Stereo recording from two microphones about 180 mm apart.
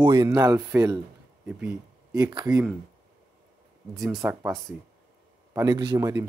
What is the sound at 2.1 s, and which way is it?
Speech, 20° right (ahead or behind).